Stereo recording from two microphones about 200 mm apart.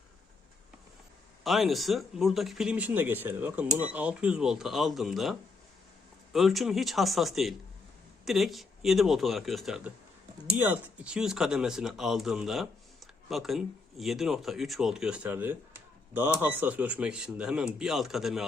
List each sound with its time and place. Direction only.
1.5 s speech: centre (ahead or behind)